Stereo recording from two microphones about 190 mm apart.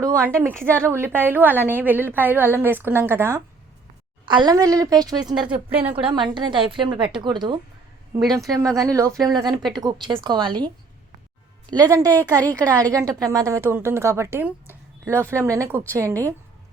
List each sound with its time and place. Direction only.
0.0 s a woman's voice: 15° right (ahead or behind)
11.7 s a woman's voice: 20° right (ahead or behind)